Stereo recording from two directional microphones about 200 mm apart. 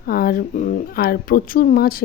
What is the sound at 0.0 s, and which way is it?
Speech, 45° left (ahead or behind).